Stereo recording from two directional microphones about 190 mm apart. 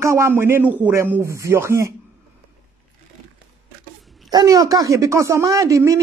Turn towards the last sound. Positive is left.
turn(degrees=-15)  # may be behind; listen again after turning